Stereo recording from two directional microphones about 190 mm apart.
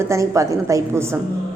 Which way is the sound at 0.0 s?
15° right (ahead or behind).